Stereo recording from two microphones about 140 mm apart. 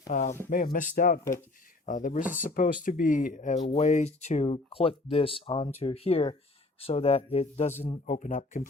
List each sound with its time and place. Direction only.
0.1 s speech: 70° left (ahead or behind)
0.5 s speech: 80° left
1.9 s speech: 70° left (ahead or behind)
3.7 s speech: 55° left (ahead or behind)
8.0 s speech: 65° left (ahead or behind)